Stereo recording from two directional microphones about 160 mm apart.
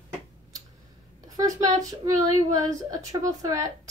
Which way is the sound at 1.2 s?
20° right (ahead or behind).